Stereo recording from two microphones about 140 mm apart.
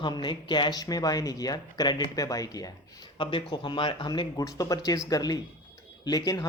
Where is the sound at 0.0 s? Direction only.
35° left (ahead or behind).